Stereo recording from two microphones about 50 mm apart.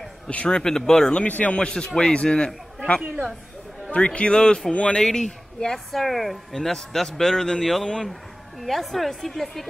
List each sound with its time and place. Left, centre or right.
0.3 s speech: left
1.2 s a man's voice: left
1.6 s speech: centre
3.9 s speech: left
5.0 s speech: centre
5.9 s a man's voice: centre